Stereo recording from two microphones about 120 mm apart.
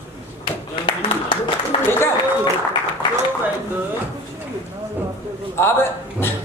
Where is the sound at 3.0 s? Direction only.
40° left (ahead or behind).